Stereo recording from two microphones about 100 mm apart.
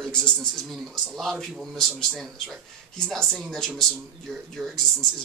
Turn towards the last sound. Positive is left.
turn(degrees=5)  # may be behind; listen again after turning